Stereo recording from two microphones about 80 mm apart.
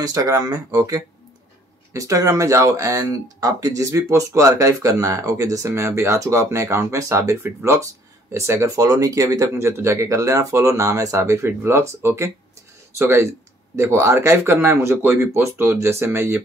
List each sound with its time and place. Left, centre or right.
0.0 s speech: right